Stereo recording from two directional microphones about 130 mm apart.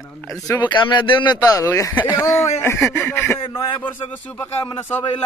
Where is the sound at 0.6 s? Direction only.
35° left (ahead or behind).